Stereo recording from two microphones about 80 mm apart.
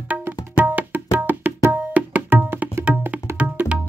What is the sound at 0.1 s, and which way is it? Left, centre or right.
Tabla, centre.